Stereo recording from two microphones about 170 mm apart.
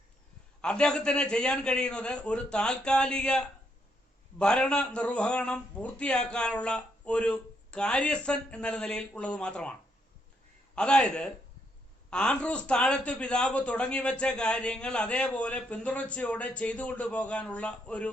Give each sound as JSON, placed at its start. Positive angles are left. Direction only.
{"t": 0.6, "sound": "a man's voice", "side_deg": 5}
{"t": 10.8, "sound": "a man's voice", "side_deg": 5}